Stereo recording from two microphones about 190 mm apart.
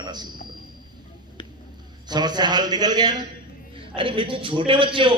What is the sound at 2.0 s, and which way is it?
A man's voice, 20° right (ahead or behind).